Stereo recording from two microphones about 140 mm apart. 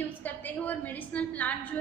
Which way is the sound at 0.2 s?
10° left (ahead or behind).